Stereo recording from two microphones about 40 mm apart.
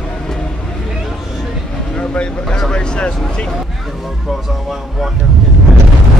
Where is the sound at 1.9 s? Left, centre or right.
Left.